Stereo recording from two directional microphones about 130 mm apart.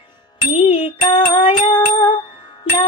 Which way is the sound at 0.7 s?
40° left (ahead or behind).